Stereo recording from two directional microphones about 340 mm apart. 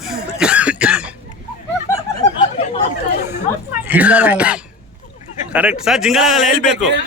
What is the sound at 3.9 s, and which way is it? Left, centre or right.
Speech, centre.